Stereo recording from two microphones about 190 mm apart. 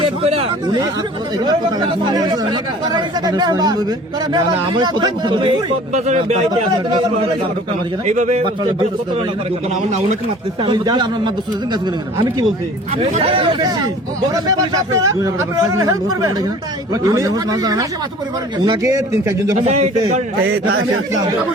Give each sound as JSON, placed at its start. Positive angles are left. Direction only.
{"t": 0.0, "sound": "speech", "side_deg": -30}
{"t": 5.9, "sound": "a man's voice", "side_deg": -35}
{"t": 8.0, "sound": "a man's voice", "side_deg": -40}
{"t": 10.6, "sound": "speech", "side_deg": -25}
{"t": 13.0, "sound": "speech", "side_deg": -30}
{"t": 19.5, "sound": "a man's voice", "side_deg": -35}